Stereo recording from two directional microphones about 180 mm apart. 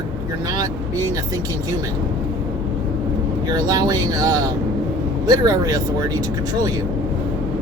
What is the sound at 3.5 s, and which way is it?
Speech, 20° right (ahead or behind).